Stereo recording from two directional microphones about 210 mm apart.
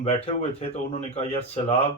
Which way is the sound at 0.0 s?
30° left (ahead or behind).